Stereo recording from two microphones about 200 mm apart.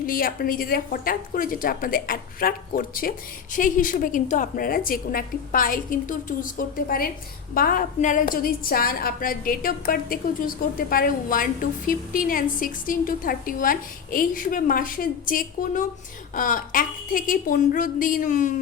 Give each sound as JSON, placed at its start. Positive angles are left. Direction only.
{"t": 0.0, "sound": "a woman's voice", "side_deg": 45}